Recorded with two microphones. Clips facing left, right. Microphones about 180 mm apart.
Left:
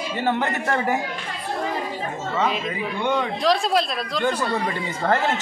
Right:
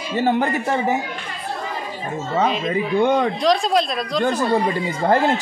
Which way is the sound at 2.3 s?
35° right (ahead or behind).